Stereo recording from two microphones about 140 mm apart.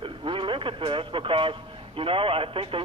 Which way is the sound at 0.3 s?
35° right (ahead or behind).